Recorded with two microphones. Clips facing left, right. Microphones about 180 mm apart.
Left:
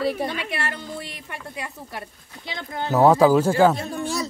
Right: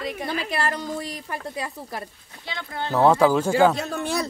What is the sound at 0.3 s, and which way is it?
A woman's voice, 35° right (ahead or behind).